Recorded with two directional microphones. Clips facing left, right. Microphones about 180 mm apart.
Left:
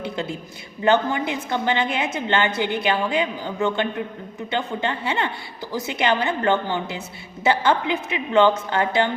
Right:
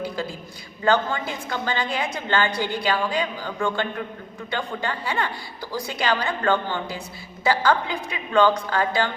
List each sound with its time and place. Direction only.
0.0 s a man's voice: 25° left (ahead or behind)